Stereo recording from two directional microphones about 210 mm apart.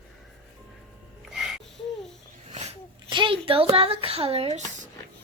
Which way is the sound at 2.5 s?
30° right (ahead or behind).